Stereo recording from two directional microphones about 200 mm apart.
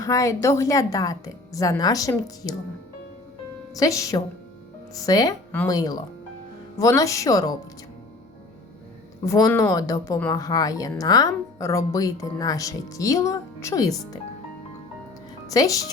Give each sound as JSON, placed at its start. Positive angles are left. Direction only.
{"t": 0.0, "sound": "a woman's voice", "side_deg": 15}
{"t": 3.8, "sound": "a woman's voice", "side_deg": 15}
{"t": 9.2, "sound": "a woman's voice", "side_deg": 15}
{"t": 15.5, "sound": "a woman's voice", "side_deg": 15}